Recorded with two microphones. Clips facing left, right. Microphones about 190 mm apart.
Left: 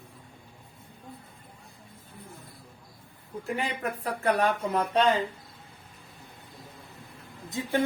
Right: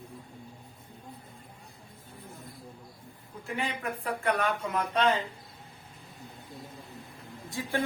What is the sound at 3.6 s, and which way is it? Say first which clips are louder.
Speech: right 1 dB; 40° left (ahead or behind).